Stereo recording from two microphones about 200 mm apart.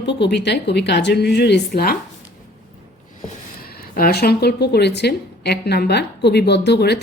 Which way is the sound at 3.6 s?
50° left (ahead or behind).